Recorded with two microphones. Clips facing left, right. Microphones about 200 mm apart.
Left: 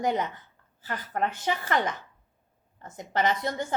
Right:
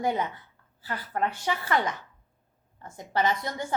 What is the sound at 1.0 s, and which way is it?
Speech, 20° left (ahead or behind).